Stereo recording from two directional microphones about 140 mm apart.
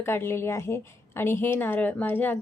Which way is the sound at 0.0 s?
15° left (ahead or behind).